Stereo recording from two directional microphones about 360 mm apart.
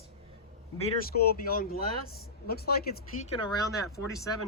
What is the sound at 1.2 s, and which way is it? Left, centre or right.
Speech, left.